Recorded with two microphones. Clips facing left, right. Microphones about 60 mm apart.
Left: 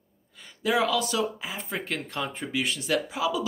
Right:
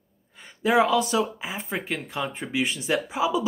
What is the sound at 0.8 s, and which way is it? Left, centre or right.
Speech, right.